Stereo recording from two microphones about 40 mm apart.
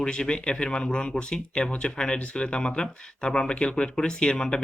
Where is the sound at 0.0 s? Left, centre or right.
Left.